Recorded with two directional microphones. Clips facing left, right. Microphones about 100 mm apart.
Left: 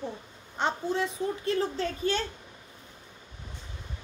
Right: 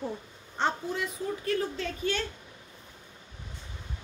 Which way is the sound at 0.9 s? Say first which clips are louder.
Left 3 dB; 30° left (ahead or behind).